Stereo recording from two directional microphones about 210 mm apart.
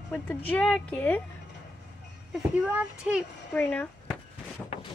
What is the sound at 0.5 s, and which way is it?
Speech, 5° left (ahead or behind).